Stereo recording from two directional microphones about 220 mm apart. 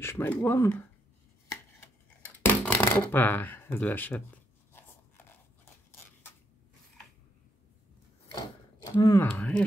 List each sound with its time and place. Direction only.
0.0 s speech: 10° left (ahead or behind)
1.5 s a sound: 5° left (ahead or behind)
8.9 s speech: 15° left (ahead or behind)
9.3 s speech: 5° left (ahead or behind)